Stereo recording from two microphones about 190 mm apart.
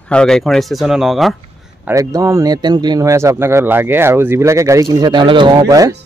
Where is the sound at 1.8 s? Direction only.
15° right (ahead or behind).